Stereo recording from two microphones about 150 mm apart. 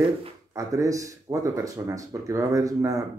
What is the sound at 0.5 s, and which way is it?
Speech, 20° right (ahead or behind).